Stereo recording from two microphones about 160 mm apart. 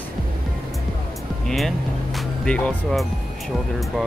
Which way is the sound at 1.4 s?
Centre (ahead or behind).